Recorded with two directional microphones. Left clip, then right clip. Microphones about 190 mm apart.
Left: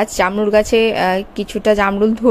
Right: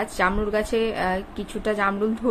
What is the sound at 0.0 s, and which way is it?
A woman's voice, 40° left (ahead or behind).